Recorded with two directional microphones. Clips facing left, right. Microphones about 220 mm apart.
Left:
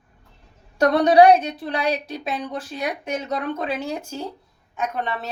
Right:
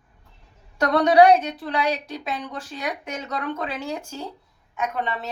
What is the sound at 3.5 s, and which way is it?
Speech, 25° left (ahead or behind).